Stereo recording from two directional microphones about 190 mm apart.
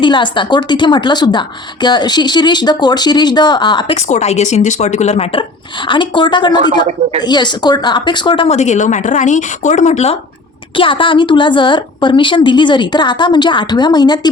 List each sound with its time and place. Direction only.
0.0 s a woman's voice: 25° left (ahead or behind)